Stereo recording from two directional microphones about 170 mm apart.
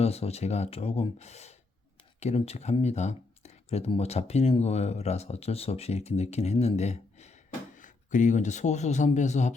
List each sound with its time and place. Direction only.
0.0 s speech: 40° left (ahead or behind)